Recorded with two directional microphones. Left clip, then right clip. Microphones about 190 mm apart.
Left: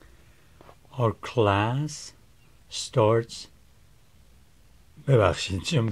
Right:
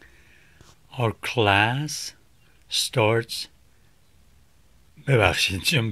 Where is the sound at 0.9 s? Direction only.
10° right (ahead or behind).